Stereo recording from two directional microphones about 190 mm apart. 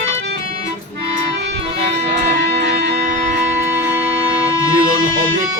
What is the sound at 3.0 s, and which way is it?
Music, 40° right (ahead or behind).